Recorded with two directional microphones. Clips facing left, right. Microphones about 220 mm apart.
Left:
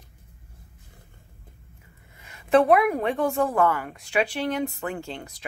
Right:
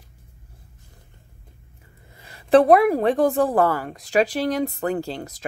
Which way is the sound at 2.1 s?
35° right (ahead or behind).